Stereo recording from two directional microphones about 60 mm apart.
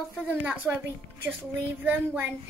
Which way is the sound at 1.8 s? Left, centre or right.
Right.